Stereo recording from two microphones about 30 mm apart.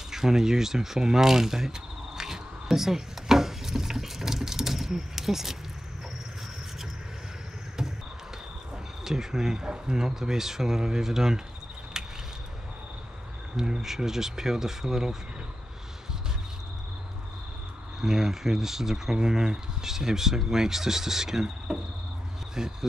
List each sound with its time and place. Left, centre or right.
0.1 s speech: centre
9.0 s speech: centre
11.9 s a sound: right
13.6 s speech: centre
18.0 s speech: centre